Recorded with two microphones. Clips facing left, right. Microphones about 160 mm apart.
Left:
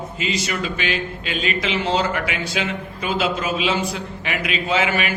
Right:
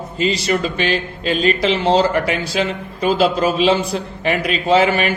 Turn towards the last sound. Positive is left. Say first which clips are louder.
# right 6 dB
turn(degrees=-35)  # may be behind; listen again after turning